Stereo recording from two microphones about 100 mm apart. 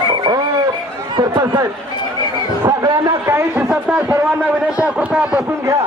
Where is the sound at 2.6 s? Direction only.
40° right (ahead or behind).